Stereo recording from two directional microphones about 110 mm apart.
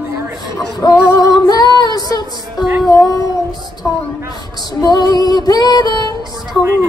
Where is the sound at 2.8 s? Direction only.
30° left (ahead or behind).